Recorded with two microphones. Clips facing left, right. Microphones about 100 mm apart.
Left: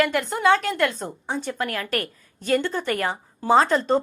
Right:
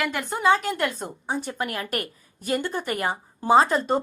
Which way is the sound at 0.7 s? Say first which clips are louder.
Left 3 dB; 15° right (ahead or behind).